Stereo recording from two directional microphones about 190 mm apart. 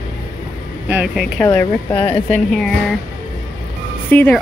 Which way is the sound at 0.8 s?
5° right (ahead or behind).